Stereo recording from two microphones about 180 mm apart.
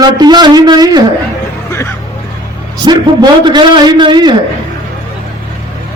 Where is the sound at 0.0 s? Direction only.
25° right (ahead or behind).